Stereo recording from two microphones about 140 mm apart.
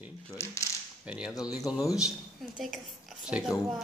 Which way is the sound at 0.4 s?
15° left (ahead or behind).